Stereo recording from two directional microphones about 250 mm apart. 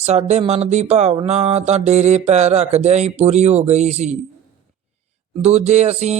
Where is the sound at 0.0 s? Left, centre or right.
Right.